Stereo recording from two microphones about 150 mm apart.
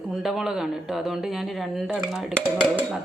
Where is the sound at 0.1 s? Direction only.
5° right (ahead or behind).